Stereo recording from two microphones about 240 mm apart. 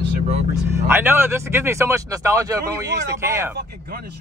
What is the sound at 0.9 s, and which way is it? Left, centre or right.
Speech, centre.